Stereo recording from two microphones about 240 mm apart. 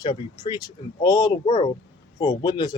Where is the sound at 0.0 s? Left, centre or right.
Centre.